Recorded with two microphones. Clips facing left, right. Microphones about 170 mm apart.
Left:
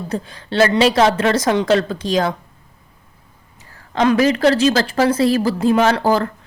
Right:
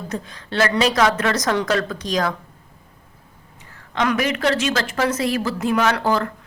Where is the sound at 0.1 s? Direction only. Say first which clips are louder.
Left 5 dB; 30° left (ahead or behind).